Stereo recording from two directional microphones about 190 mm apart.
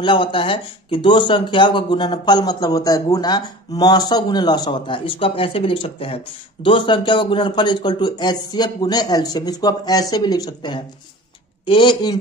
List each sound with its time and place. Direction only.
0.0 s speech: 25° left (ahead or behind)